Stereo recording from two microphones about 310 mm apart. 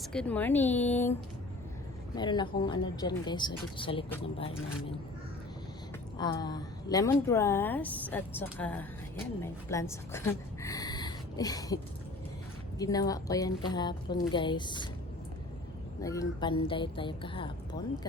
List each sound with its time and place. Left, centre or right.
0.0 s a woman's voice: centre
2.1 s a woman's voice: centre
6.1 s a woman's voice: centre
12.8 s a woman's voice: centre
16.0 s a woman's voice: centre